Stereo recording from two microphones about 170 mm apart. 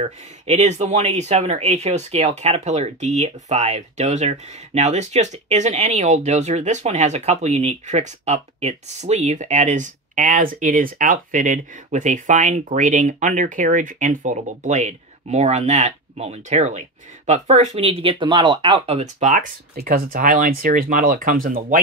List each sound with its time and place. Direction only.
0.0 s speech: 40° right (ahead or behind)